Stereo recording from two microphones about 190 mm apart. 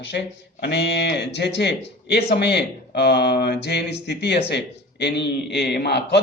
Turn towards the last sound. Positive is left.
turn(degrees=60)  # may be behind; listen again after turning